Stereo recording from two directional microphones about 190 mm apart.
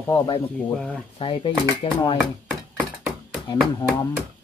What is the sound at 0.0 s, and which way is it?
Speech, 10° left (ahead or behind).